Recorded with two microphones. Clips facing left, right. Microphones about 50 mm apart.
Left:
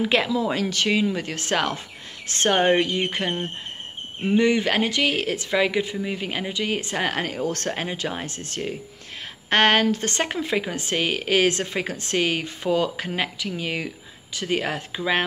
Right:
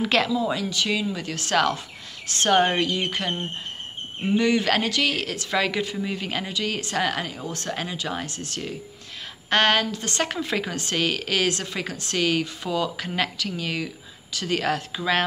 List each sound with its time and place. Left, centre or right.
0.0 s speech: centre
0.6 s speech: left
7.4 s speech: left
7.7 s speech: left
10.2 s speech: left
13.1 s speech: centre